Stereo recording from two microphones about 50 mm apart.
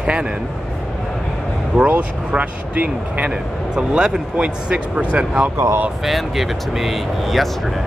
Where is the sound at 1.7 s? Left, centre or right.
Right.